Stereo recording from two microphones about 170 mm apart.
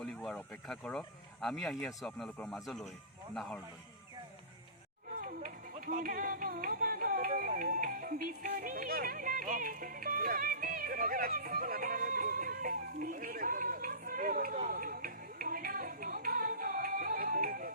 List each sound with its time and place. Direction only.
0.0 s speech: centre (ahead or behind)
5.1 s music: 55° right (ahead or behind)